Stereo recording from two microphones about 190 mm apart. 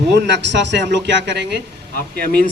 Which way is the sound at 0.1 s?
65° right (ahead or behind).